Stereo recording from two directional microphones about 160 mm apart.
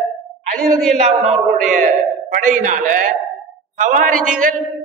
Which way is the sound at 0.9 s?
45° right (ahead or behind).